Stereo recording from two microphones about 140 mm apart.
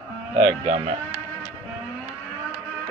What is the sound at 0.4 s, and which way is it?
Speech, 45° right (ahead or behind).